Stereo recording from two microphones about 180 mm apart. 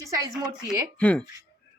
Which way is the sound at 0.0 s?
15° right (ahead or behind).